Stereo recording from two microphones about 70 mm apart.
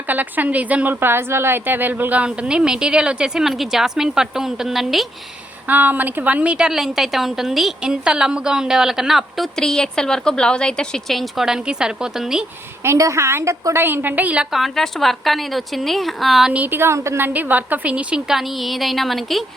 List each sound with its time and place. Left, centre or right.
0.1 s a woman's voice: right; by 5.0 s centre
5.6 s a woman's voice: right; by 12.5 s centre
12.8 s a woman's voice: right
13.8 s a woman's voice: right
14.5 s speech: centre
16.5 s a woman's voice: right
16.9 s a woman's voice: right; by 18.3 s centre
18.3 s speech: centre